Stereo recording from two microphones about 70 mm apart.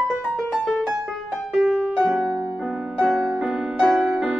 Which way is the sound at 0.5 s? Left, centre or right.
Centre.